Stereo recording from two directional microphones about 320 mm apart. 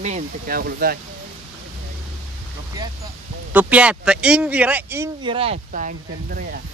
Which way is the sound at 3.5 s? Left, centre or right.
Centre.